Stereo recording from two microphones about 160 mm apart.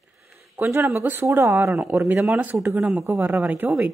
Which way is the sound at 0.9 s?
10° right (ahead or behind).